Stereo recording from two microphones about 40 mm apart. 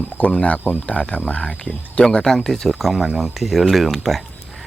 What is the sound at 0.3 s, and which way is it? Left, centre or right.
Speech, left.